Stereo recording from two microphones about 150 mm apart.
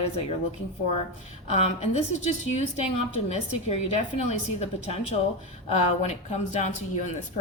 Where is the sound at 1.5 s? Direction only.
45° left (ahead or behind).